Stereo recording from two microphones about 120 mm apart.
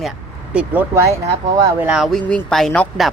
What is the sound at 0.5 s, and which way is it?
Speech, 10° right (ahead or behind).